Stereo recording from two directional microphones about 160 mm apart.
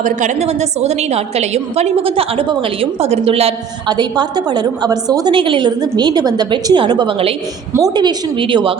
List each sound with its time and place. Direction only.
0.0 s a woman's voice: 50° right (ahead or behind)
3.8 s a woman's voice: 25° right (ahead or behind)
7.7 s a woman's voice: 20° right (ahead or behind)